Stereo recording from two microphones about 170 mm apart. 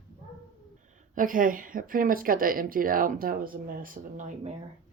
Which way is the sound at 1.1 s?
55° right (ahead or behind).